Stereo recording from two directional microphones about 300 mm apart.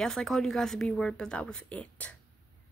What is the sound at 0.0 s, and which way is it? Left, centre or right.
A woman's voice, centre.